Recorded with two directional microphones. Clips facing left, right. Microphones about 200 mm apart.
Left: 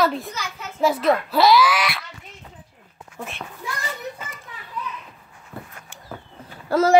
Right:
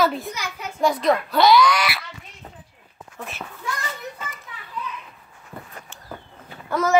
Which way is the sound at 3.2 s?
5° right (ahead or behind).